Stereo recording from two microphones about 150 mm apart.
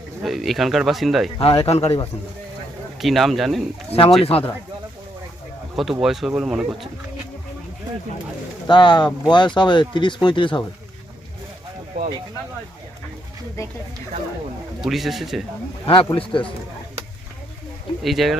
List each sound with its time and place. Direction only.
0.2 s speech: centre (ahead or behind)
1.4 s speech: 40° left (ahead or behind)
3.0 s speech: centre (ahead or behind)
4.2 s speech: 40° left (ahead or behind)
5.7 s speech: centre (ahead or behind)
8.6 s speech: 30° left (ahead or behind)
11.9 s speech: 35° right (ahead or behind)
14.8 s speech: centre (ahead or behind)
15.9 s speech: 35° left (ahead or behind)
18.0 s speech: centre (ahead or behind)